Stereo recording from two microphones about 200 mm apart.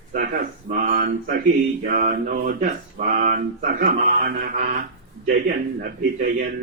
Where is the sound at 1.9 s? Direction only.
40° right (ahead or behind).